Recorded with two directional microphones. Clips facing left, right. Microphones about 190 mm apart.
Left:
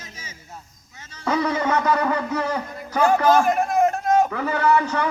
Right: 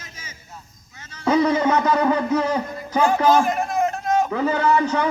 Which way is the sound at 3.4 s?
55° left (ahead or behind).